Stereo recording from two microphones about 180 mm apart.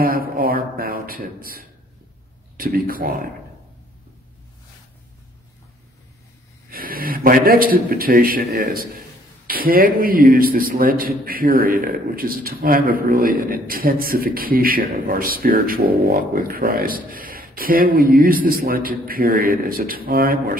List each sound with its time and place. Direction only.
0.0 s a man's voice: 55° right (ahead or behind)
6.7 s a man's voice: 55° right (ahead or behind)